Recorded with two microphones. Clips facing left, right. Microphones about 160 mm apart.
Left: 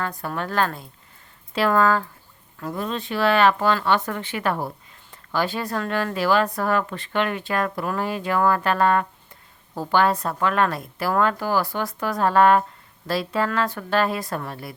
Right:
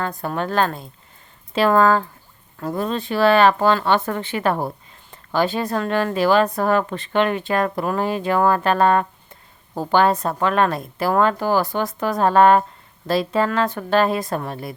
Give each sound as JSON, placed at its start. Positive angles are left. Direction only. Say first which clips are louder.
{"t": 0.2, "sound": "a woman's voice", "louder": "right 4 dB", "side_deg": -25}
{"t": 2.6, "sound": "a woman's voice", "louder": "right 4 dB", "side_deg": -40}